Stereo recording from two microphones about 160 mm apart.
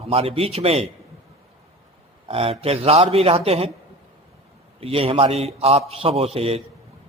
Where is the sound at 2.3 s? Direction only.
40° right (ahead or behind).